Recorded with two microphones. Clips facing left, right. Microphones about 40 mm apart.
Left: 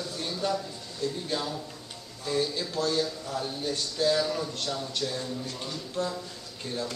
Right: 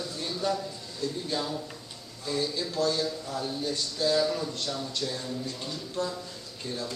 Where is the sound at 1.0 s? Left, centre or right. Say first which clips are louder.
Even; centre.